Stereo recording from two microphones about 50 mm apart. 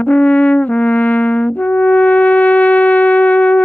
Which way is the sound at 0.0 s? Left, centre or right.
Left.